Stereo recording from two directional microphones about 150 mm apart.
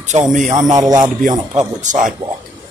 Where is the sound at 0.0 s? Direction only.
50° right (ahead or behind).